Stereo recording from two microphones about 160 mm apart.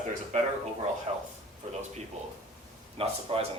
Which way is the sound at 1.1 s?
35° right (ahead or behind).